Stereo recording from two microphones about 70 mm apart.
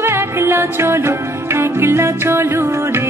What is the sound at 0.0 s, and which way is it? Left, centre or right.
Music, right.